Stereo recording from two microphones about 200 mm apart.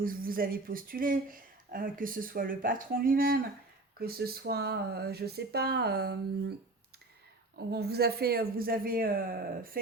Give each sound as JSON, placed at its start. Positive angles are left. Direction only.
{"t": 0.0, "sound": "speech", "side_deg": -45}
{"t": 7.7, "sound": "speech", "side_deg": -55}